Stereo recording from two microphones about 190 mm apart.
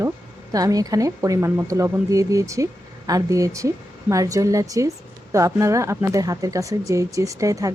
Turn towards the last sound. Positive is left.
turn(degrees=-15)  # may be behind; listen again after turning